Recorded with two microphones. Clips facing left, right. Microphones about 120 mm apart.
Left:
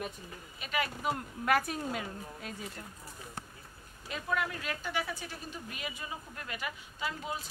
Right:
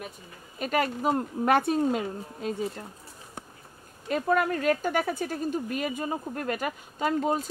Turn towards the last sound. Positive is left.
turn(degrees=-45)  # may be behind; listen again after turning